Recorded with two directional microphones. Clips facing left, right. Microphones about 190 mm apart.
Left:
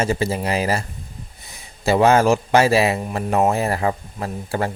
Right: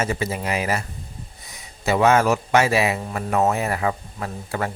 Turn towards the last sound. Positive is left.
turn(degrees=30)  # may be behind; listen again after turning